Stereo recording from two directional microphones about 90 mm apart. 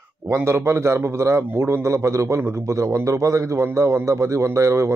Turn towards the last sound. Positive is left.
turn(degrees=-35)  # may be behind; listen again after turning